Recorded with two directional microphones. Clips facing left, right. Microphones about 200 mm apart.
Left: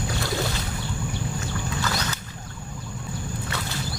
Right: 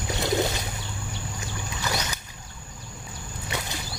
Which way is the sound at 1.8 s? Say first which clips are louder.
Right 3 dB; 15° right (ahead or behind).